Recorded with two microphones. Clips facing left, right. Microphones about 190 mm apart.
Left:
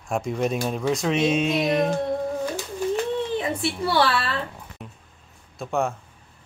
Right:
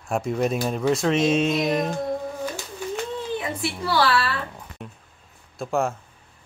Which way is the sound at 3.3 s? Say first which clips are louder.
Left 3 dB; 25° left (ahead or behind).